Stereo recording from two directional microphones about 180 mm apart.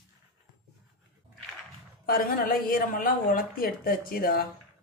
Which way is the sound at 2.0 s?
55° left (ahead or behind).